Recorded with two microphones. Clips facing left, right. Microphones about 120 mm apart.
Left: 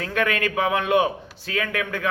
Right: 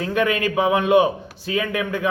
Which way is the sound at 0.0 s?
10° right (ahead or behind).